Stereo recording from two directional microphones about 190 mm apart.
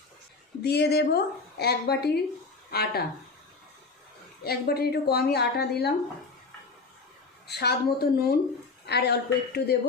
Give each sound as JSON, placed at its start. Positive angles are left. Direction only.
{"t": 0.6, "sound": "a woman's voice", "side_deg": 60}
{"t": 4.4, "sound": "a woman's voice", "side_deg": 55}
{"t": 7.4, "sound": "a woman's voice", "side_deg": 60}